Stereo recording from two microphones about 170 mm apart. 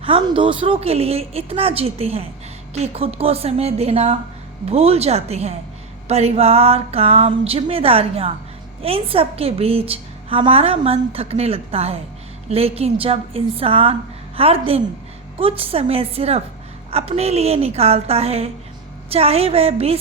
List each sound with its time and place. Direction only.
0.0 s a woman's voice: 30° right (ahead or behind)